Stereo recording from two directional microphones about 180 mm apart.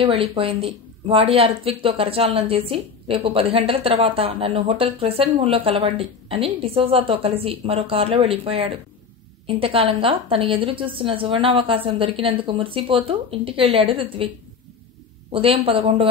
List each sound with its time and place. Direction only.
0.0 s a woman's voice: 30° right (ahead or behind)
15.3 s speech: 30° right (ahead or behind)